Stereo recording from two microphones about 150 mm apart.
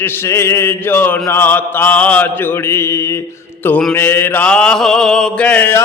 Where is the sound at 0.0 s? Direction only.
15° left (ahead or behind).